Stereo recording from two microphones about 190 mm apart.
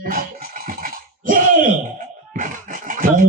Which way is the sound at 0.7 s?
45° right (ahead or behind).